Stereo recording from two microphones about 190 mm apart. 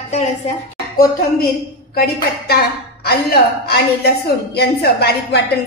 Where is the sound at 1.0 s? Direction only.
55° left (ahead or behind).